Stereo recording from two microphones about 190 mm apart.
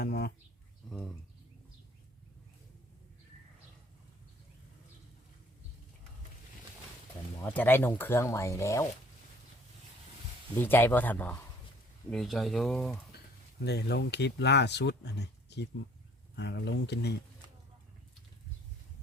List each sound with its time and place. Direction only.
0.0 s a sound: 55° left (ahead or behind)
7.4 s speech: 10° left (ahead or behind)
10.6 s speech: 10° left (ahead or behind)
13.6 s speech: 60° left (ahead or behind)